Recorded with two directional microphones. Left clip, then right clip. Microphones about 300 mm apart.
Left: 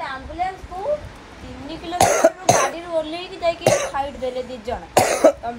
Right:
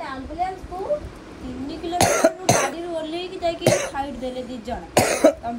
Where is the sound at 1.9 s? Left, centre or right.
Centre.